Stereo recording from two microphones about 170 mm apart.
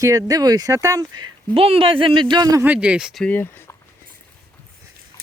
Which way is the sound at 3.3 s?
15° left (ahead or behind).